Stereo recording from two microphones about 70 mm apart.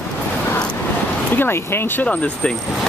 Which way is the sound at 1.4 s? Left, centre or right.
Left.